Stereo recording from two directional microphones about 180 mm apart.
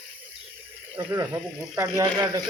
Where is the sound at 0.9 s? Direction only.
10° right (ahead or behind).